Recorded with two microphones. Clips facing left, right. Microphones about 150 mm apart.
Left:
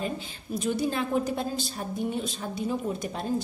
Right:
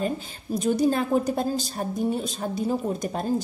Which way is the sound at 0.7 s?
45° right (ahead or behind).